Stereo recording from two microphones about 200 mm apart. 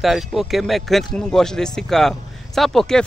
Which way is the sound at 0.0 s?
Centre (ahead or behind).